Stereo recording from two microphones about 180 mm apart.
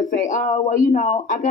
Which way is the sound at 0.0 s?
45° left (ahead or behind).